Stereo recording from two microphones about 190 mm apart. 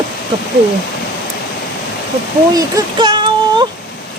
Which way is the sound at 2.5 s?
20° right (ahead or behind).